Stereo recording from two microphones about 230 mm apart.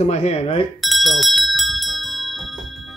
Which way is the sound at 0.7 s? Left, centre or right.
Centre.